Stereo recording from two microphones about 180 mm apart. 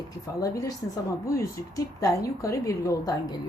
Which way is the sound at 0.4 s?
15° left (ahead or behind).